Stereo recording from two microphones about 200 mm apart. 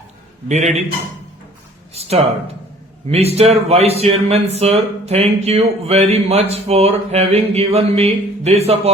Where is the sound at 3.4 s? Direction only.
30° right (ahead or behind).